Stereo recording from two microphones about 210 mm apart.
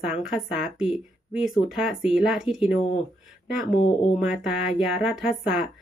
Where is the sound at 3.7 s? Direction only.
30° left (ahead or behind).